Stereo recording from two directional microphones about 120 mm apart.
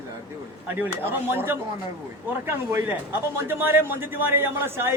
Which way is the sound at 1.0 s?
20° right (ahead or behind).